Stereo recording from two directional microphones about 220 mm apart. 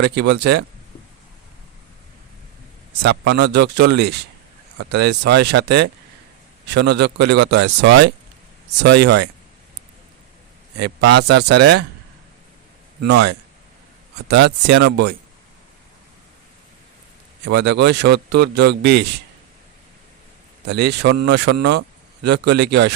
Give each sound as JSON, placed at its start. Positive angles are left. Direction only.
{"t": 0.0, "sound": "speech", "side_deg": -50}
{"t": 3.0, "sound": "speech", "side_deg": -50}
{"t": 10.8, "sound": "speech", "side_deg": -50}
{"t": 13.1, "sound": "speech", "side_deg": -50}
{"t": 17.5, "sound": "speech", "side_deg": -50}
{"t": 20.7, "sound": "speech", "side_deg": -50}